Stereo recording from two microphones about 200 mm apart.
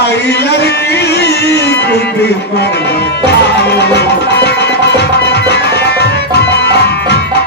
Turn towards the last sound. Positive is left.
turn(degrees=55)  # may be behind; listen again after turning